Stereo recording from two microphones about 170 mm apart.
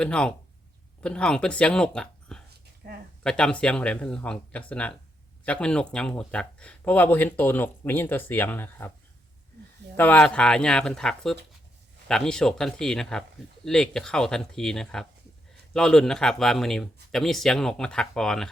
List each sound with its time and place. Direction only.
0.0 s speech: 5° left (ahead or behind)
2.5 s a sound: 60° right (ahead or behind)
3.2 s speech: 5° left (ahead or behind)
10.0 s speech: 10° left (ahead or behind)